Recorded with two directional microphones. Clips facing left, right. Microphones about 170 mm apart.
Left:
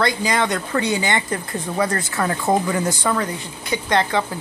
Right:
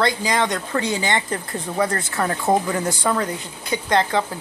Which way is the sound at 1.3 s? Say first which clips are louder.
Left 1 dB; 25° right (ahead or behind).